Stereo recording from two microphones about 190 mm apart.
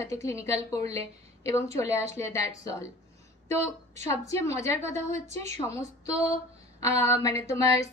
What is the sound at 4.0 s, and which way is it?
Speech, 15° left (ahead or behind).